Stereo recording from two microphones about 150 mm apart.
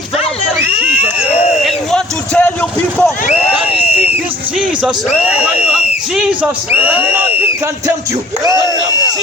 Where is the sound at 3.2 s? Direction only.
45° left (ahead or behind).